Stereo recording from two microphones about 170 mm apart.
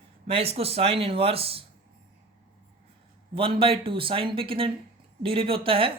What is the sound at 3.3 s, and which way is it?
Speech, 30° right (ahead or behind).